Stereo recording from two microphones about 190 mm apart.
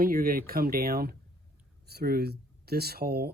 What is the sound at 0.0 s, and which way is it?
Speech, 50° right (ahead or behind).